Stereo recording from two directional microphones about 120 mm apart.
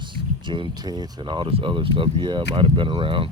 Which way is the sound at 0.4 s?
40° right (ahead or behind).